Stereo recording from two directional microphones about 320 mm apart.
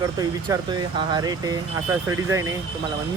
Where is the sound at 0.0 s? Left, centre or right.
Centre.